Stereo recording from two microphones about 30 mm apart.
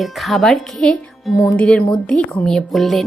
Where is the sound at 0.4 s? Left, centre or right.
Centre.